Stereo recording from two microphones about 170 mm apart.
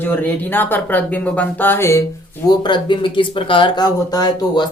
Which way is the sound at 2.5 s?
25° left (ahead or behind).